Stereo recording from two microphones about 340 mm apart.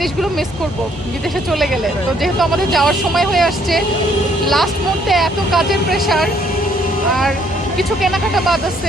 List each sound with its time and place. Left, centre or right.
0.0 s speech: centre
1.5 s speech: centre
7.8 s speech: centre